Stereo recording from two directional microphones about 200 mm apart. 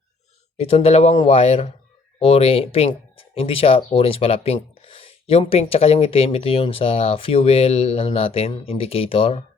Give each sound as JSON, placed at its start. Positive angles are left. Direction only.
{"t": 0.5, "sound": "speech", "side_deg": 30}